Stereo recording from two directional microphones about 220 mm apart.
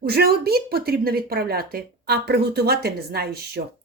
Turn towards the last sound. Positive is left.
turn(degrees=-45)  # may be behind; listen again after turning